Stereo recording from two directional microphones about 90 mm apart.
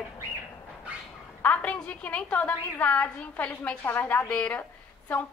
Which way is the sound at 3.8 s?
25° left (ahead or behind).